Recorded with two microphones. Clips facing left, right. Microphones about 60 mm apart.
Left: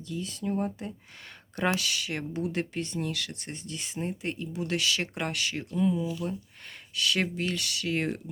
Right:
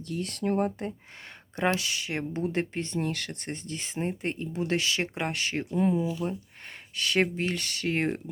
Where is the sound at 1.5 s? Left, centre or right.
Right.